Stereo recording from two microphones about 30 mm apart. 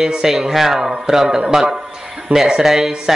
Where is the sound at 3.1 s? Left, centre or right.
Centre.